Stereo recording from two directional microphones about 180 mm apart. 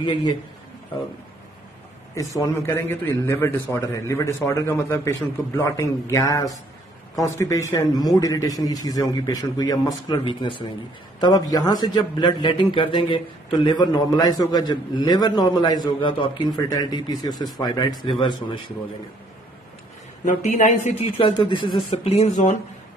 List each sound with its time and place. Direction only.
0.0 s a man's voice: 25° left (ahead or behind)
2.1 s a man's voice: 20° left (ahead or behind)
20.2 s a woman's voice: 45° left (ahead or behind)
21.0 s speech: 30° left (ahead or behind)